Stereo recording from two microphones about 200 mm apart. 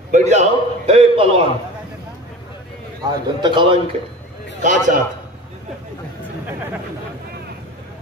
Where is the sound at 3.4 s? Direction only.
25° right (ahead or behind).